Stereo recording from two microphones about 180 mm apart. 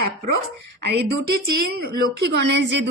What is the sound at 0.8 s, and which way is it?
A woman's voice, 65° right (ahead or behind).